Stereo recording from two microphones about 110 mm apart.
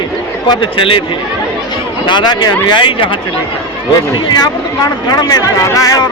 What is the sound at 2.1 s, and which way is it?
Speech, 40° left (ahead or behind).